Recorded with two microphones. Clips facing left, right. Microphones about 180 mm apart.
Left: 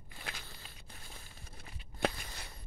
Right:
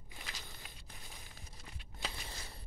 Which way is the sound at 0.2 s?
55° left (ahead or behind).